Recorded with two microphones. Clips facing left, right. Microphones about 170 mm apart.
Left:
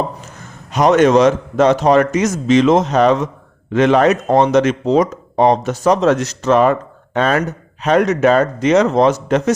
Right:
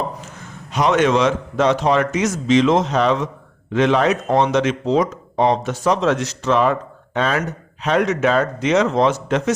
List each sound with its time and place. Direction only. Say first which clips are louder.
0.7 s speech: left 5 dB; 45° left (ahead or behind)